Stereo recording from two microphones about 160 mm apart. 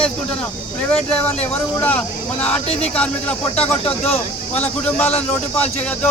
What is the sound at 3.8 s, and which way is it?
Speech, 40° left (ahead or behind).